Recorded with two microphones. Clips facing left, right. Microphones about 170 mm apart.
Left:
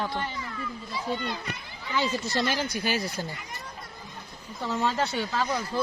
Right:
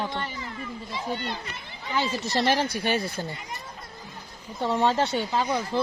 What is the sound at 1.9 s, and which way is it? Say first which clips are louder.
Speech: right 1 dB; 30° right (ahead or behind).